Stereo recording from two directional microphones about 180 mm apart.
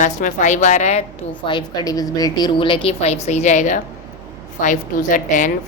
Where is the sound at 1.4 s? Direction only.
25° left (ahead or behind); by 5.5 s 45° left (ahead or behind).